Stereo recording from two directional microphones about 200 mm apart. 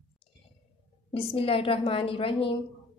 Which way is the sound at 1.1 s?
25° left (ahead or behind).